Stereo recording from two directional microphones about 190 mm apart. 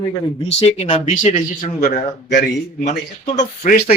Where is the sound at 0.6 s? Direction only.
35° left (ahead or behind).